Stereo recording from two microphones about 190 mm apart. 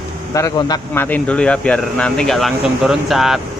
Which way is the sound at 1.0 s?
10° left (ahead or behind).